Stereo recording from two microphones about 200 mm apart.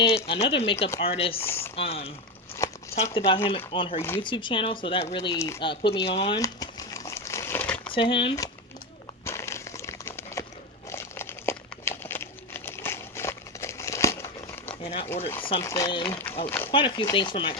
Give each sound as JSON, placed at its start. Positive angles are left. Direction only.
{"t": 0.3, "sound": "speech", "side_deg": 30}
{"t": 3.2, "sound": "speech", "side_deg": 30}
{"t": 5.3, "sound": "speech", "side_deg": 15}
{"t": 5.5, "sound": "speech", "side_deg": 25}
{"t": 6.4, "sound": "crumpling", "side_deg": 15}
{"t": 7.9, "sound": "speech", "side_deg": 25}
{"t": 9.2, "sound": "crumpling", "side_deg": 15}
{"t": 14.8, "sound": "a sound", "side_deg": 30}
{"t": 15.1, "sound": "speech", "side_deg": 10}
{"t": 16.5, "sound": "a sound", "side_deg": 10}
{"t": 16.7, "sound": "speech", "side_deg": 25}